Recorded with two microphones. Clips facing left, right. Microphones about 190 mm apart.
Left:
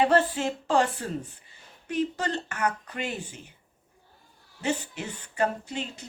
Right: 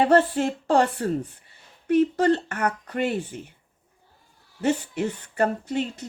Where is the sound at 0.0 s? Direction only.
50° right (ahead or behind).